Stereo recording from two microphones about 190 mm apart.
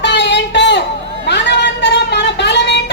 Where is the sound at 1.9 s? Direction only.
65° left (ahead or behind).